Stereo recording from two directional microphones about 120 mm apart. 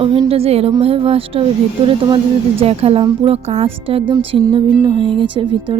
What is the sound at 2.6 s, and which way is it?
Speech, 55° right (ahead or behind).